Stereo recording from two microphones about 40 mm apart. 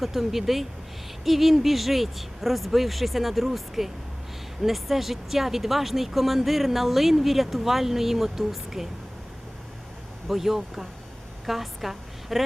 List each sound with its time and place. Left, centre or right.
0.0 s speech: centre
10.2 s a woman's voice: centre